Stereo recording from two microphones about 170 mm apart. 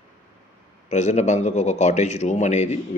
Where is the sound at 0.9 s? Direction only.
40° left (ahead or behind).